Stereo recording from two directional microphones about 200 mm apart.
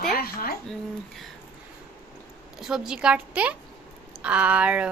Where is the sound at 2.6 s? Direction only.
Centre (ahead or behind).